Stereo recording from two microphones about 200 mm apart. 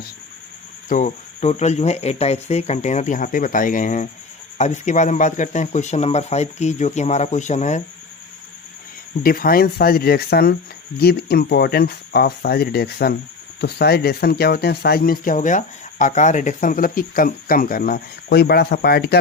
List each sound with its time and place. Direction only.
0.9 s speech: 40° left (ahead or behind)
9.2 s speech: 45° left (ahead or behind)